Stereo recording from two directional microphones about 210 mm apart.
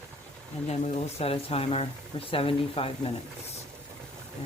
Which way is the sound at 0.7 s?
30° left (ahead or behind).